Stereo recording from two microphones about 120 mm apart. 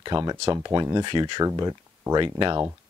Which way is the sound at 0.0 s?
35° right (ahead or behind).